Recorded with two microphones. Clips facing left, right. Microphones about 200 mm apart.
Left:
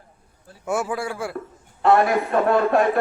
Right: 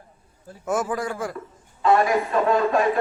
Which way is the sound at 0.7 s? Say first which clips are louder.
Even; 10° left (ahead or behind).